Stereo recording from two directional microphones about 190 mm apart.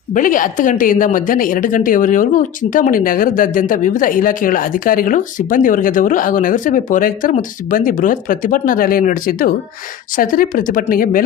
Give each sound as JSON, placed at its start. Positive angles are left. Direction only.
{"t": 0.1, "sound": "speech", "side_deg": 45}